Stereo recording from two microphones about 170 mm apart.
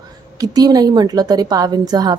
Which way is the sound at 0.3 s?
25° right (ahead or behind).